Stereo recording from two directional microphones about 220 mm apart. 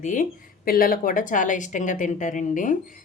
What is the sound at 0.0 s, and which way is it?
A woman's voice, 35° left (ahead or behind).